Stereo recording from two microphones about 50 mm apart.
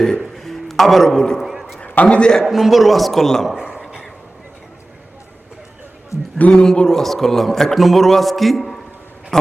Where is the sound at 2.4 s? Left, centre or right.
Centre.